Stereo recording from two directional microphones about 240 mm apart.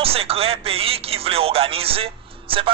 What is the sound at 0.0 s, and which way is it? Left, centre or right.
Speech, right.